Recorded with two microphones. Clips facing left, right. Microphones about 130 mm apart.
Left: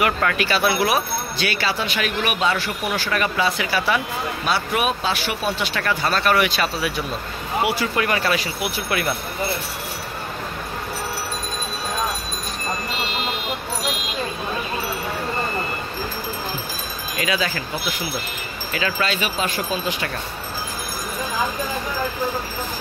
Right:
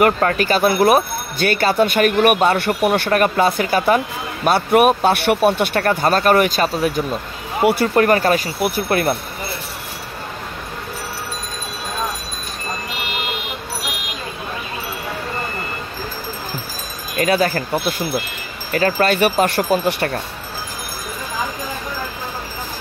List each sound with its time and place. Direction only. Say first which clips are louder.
0.0 s speech: right 5 dB; 40° right (ahead or behind)
17.2 s speech: right 7 dB; 50° right (ahead or behind)
19.1 s speech: right 8 dB; 65° right (ahead or behind)